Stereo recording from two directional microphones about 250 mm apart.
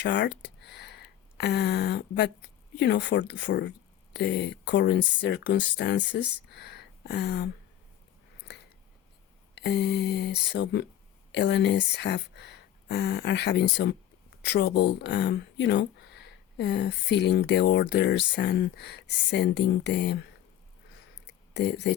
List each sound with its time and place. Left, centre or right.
0.0 s speech: left
9.6 s speech: left
21.5 s speech: left